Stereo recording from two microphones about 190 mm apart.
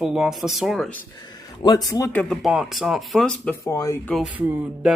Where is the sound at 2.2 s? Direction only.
Centre (ahead or behind).